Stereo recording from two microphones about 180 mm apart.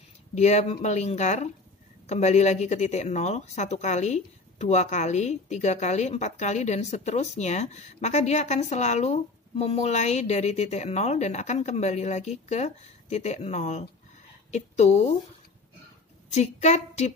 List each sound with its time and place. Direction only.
0.3 s speech: 40° left (ahead or behind)
16.3 s speech: 40° left (ahead or behind)